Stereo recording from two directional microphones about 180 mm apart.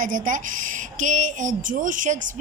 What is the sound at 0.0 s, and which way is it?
A woman's voice, 45° right (ahead or behind).